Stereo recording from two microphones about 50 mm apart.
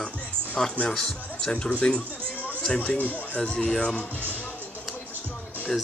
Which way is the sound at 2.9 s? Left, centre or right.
Left.